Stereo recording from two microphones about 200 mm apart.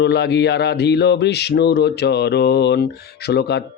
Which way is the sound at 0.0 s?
60° left (ahead or behind).